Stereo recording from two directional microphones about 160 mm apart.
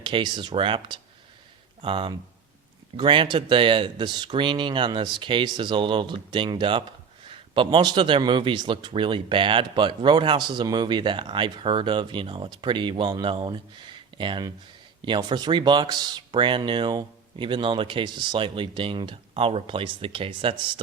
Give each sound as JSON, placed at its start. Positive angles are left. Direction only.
{"t": 0.0, "sound": "a man's voice", "side_deg": -30}